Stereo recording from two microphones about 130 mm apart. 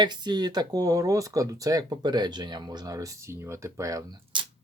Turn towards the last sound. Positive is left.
turn(degrees=-35)  # may be behind; listen again after turning